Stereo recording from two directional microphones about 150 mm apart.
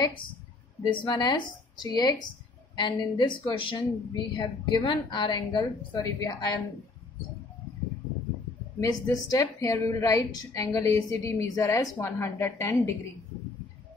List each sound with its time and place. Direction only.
0.8 s a woman's voice: 30° left (ahead or behind)
8.7 s a woman's voice: 25° left (ahead or behind)